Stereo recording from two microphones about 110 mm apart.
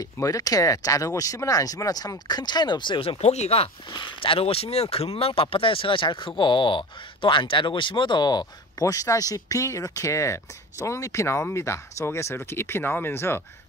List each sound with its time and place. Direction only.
0.0 s speech: 35° left (ahead or behind); by 3.2 s 50° left (ahead or behind)
3.2 s speech: 85° left; by 3.7 s 65° left (ahead or behind)
3.9 s speech: 50° left (ahead or behind); by 13.4 s 20° left (ahead or behind)